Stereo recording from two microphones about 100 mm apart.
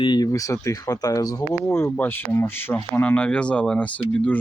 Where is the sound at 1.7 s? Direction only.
25° left (ahead or behind).